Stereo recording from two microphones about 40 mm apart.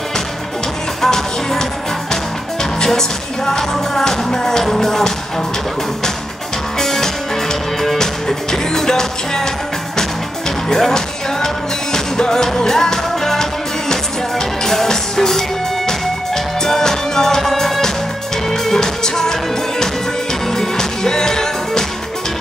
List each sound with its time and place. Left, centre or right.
1.0 s music: centre
2.8 s music: centre
6.8 s music: centre
10.7 s music: centre
16.6 s music: centre
20.5 s music: centre